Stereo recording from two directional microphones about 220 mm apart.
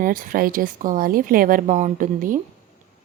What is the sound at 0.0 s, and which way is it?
Speech, 40° right (ahead or behind).